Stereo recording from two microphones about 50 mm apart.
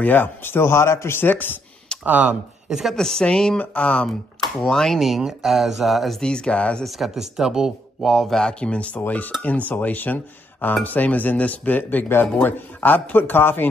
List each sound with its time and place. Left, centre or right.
0.0 s speech: left
1.3 s speech: left
2.0 s speech: right
2.7 s speech: centre
3.0 s speech: centre
3.5 s speech: left
4.6 s speech: centre
4.9 s speech: centre
6.2 s speech: centre
6.8 s speech: centre
8.3 s speech: centre
9.0 s speech: left